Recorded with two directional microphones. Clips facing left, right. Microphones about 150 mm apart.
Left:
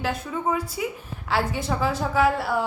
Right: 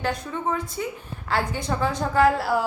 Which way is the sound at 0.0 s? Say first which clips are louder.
Even; 5° left (ahead or behind).